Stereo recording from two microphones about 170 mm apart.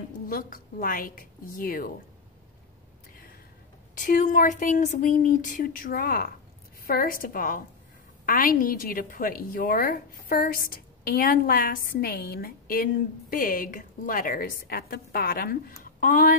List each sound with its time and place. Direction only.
0.3 s a woman's voice: 55° left (ahead or behind)
3.9 s a woman's voice: 50° left (ahead or behind)